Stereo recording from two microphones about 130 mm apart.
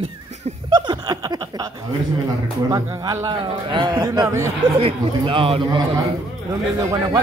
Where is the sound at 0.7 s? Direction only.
35° right (ahead or behind).